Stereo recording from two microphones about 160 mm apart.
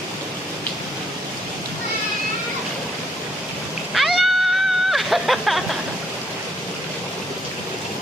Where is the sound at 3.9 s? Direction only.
Centre (ahead or behind).